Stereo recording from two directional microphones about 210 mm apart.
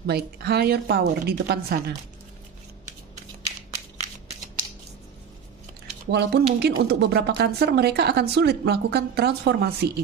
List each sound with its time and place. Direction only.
0.0 s speech: 50° right (ahead or behind)
6.0 s speech: 50° right (ahead or behind)